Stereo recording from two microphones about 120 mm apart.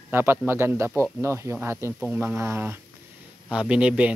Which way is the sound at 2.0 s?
10° right (ahead or behind).